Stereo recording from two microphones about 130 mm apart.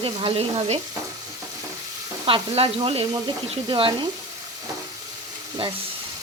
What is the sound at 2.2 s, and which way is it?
Frying, 45° right (ahead or behind).